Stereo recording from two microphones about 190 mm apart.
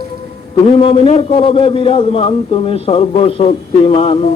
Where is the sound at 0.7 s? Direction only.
30° left (ahead or behind).